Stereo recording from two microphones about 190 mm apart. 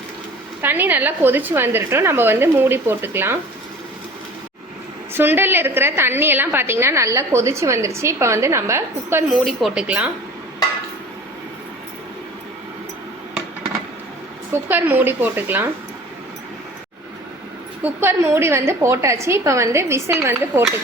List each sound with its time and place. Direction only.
0.6 s a woman's voice: 10° right (ahead or behind)
5.1 s a woman's voice: 10° right (ahead or behind)
9.3 s speech: centre (ahead or behind)
14.5 s a woman's voice: 10° right (ahead or behind)
18.0 s a woman's voice: 10° right (ahead or behind)